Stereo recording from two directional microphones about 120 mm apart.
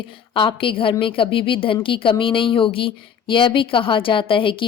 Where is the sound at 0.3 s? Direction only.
45° left (ahead or behind).